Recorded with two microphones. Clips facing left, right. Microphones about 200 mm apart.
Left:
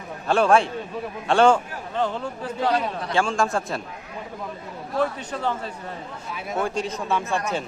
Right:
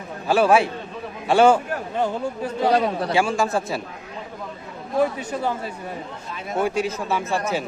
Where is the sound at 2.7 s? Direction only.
40° right (ahead or behind).